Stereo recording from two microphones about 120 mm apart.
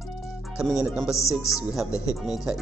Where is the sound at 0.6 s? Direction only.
5° right (ahead or behind).